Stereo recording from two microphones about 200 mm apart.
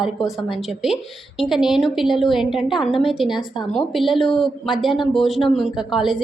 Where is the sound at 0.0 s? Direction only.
Centre (ahead or behind).